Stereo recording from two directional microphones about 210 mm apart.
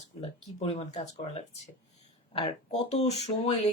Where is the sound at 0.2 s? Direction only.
25° left (ahead or behind).